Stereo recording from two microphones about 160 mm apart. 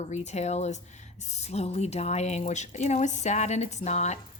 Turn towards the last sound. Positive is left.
turn(degrees=45)  # may be behind; listen again after turning